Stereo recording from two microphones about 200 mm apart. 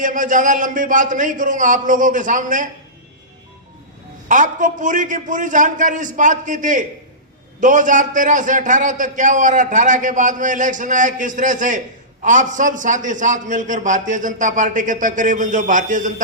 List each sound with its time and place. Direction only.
0.0 s a man's voice: 40° right (ahead or behind)
4.3 s a man's voice: 40° right (ahead or behind)